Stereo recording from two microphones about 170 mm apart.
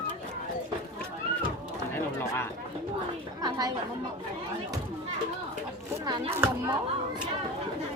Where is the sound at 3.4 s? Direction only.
25° right (ahead or behind).